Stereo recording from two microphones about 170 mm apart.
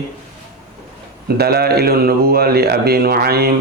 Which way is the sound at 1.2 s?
65° right (ahead or behind).